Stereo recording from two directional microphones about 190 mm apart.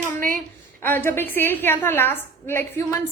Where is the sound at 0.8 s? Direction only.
10° left (ahead or behind).